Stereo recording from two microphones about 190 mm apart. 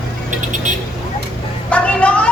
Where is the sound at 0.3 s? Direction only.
40° right (ahead or behind).